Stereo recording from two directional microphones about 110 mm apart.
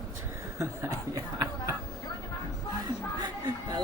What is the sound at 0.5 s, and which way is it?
Speech, 30° right (ahead or behind).